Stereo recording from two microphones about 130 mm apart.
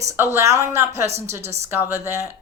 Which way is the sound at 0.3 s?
20° right (ahead or behind).